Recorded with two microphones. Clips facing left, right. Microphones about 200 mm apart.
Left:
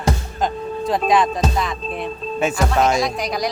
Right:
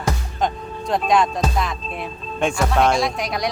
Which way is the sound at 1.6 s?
Centre (ahead or behind).